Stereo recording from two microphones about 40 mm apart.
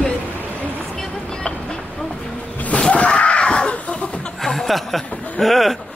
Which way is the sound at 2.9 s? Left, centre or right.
Left.